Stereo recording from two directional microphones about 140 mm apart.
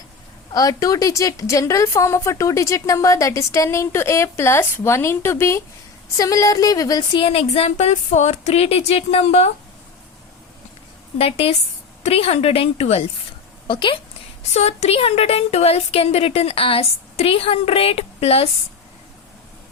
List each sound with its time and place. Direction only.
0.5 s a woman's voice: 25° left (ahead or behind)
7.2 s a woman's voice: 45° left (ahead or behind)
11.2 s a woman's voice: 45° left (ahead or behind)
14.5 s a woman's voice: 50° left (ahead or behind)